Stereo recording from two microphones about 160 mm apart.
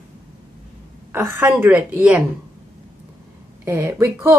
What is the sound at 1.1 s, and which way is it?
A woman's voice, 15° right (ahead or behind).